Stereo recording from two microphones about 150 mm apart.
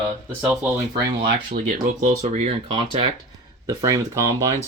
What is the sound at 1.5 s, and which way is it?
Speech, 65° right (ahead or behind).